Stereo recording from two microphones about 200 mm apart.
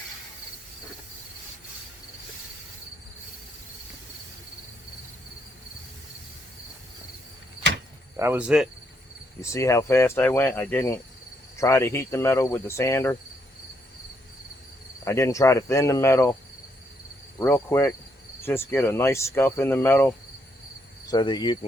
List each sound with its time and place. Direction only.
8.1 s cricket: 10° right (ahead or behind)
9.4 s speech: 15° left (ahead or behind)
15.0 s speech: 15° left (ahead or behind)
17.4 s speech: 15° left (ahead or behind)